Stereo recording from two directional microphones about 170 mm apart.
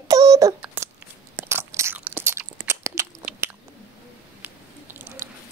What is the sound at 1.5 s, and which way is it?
Biting, 15° right (ahead or behind).